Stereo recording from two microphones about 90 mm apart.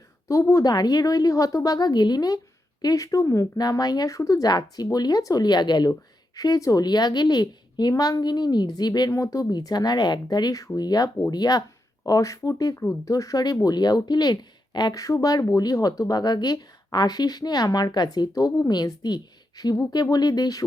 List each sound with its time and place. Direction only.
0.3 s speech: 35° left (ahead or behind)
9.0 s speech: 35° left (ahead or behind)
12.7 s speech: 25° left (ahead or behind)
13.1 s speech: 40° left (ahead or behind)